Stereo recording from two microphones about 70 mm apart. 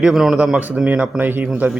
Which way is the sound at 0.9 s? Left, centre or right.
Right.